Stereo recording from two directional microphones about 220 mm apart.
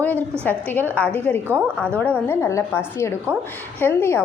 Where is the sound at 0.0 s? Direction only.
5° left (ahead or behind).